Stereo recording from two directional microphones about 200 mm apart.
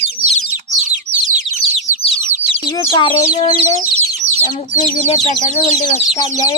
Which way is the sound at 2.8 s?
20° left (ahead or behind).